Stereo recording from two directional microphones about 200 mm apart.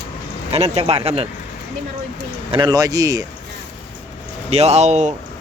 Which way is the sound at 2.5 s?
20° right (ahead or behind).